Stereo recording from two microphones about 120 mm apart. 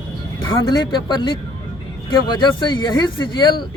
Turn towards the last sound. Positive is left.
turn(degrees=40)  # may be behind; listen again after turning